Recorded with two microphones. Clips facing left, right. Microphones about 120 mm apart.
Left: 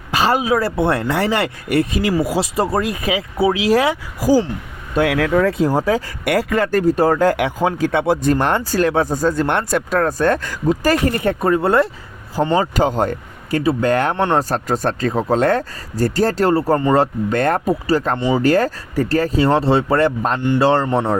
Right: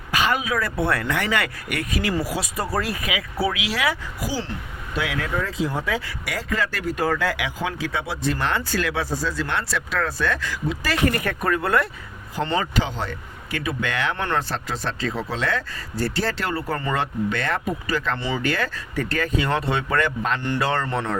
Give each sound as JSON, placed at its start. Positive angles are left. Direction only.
{"t": 0.1, "sound": "speech", "side_deg": 30}
{"t": 3.6, "sound": "speech", "side_deg": 40}
{"t": 4.9, "sound": "speech", "side_deg": 65}
{"t": 5.6, "sound": "speech", "side_deg": 40}
{"t": 6.2, "sound": "speech", "side_deg": 60}
{"t": 11.1, "sound": "speech", "side_deg": 25}
{"t": 12.7, "sound": "speech", "side_deg": 45}
{"t": 20.8, "sound": "speech", "side_deg": 20}